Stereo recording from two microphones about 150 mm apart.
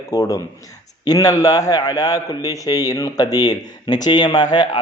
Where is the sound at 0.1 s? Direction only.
20° left (ahead or behind).